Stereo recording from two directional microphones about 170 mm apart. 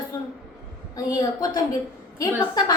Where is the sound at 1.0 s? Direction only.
20° left (ahead or behind).